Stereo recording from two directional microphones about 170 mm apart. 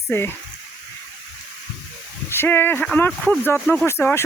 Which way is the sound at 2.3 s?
15° left (ahead or behind).